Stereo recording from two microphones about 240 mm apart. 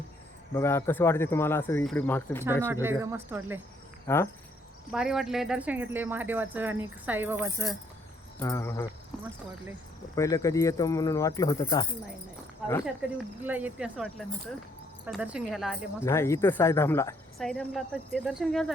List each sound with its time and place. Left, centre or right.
0.5 s speech: centre
2.8 s speech: centre
4.0 s speech: centre
4.9 s speech: centre
8.4 s speech: centre
10.2 s speech: centre
13.4 s a woman's voice: centre
16.0 s a woman's voice: centre